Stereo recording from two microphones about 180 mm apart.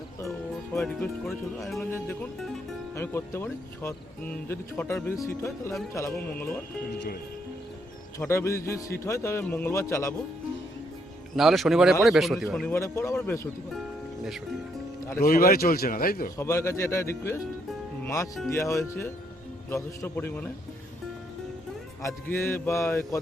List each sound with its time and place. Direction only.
0.2 s music: 15° left (ahead or behind)
0.8 s speech: 5° left (ahead or behind)
1.8 s speech: 15° left (ahead or behind)
8.3 s speech: 15° left (ahead or behind)
11.3 s speech: centre (ahead or behind)
12.7 s speech: 15° left (ahead or behind)
15.2 s speech: 55° left (ahead or behind)
16.4 s speech: 15° left (ahead or behind)
18.0 s music: 15° left (ahead or behind)
18.4 s speech: 15° left (ahead or behind)
22.0 s speech: 10° left (ahead or behind)